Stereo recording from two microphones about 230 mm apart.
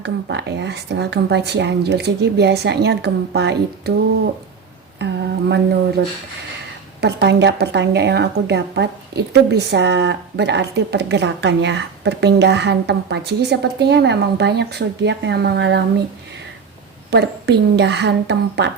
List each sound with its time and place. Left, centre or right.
0.0 s a woman's voice: right
4.9 s a sound: right
7.0 s a woman's voice: right
17.1 s a woman's voice: right